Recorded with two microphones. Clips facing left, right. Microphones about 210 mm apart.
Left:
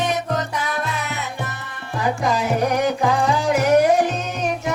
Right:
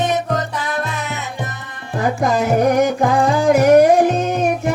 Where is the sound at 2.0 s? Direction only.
50° right (ahead or behind).